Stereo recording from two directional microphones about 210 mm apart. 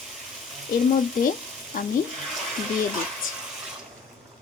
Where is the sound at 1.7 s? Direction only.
45° left (ahead or behind).